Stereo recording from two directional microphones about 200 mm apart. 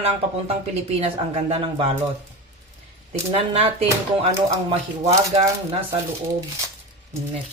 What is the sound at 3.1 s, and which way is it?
Speech, 30° right (ahead or behind).